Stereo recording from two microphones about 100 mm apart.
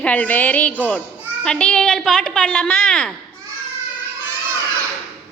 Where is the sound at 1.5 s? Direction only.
10° left (ahead or behind).